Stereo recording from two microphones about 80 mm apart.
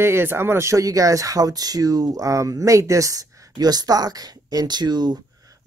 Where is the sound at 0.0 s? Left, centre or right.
Right.